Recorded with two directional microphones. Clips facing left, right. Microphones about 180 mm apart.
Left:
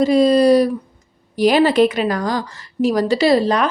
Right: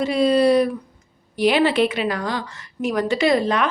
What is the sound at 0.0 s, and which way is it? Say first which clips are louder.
A woman's voice: left 4 dB; 40° left (ahead or behind).